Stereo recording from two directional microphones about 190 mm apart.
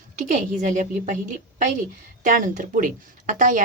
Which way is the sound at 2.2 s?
45° right (ahead or behind).